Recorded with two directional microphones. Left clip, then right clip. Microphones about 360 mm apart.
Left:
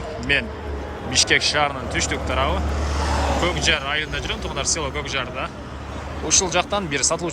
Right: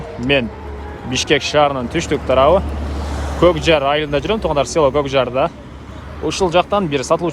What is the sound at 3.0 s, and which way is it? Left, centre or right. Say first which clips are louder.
Vehicle: left 7 dB; centre.